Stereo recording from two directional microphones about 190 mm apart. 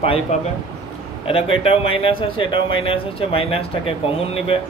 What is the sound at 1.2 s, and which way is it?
Speech, 30° left (ahead or behind).